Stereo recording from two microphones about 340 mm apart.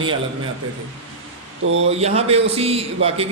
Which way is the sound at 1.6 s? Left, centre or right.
Right.